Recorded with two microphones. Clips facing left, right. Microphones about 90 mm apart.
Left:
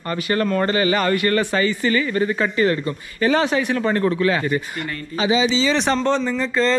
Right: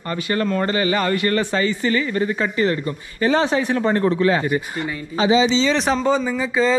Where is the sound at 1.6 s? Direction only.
30° right (ahead or behind).